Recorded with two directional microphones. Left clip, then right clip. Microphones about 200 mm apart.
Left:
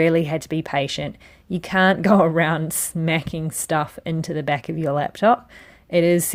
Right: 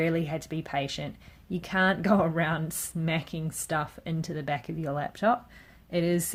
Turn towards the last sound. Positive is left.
turn(degrees=40)  # may be behind; listen again after turning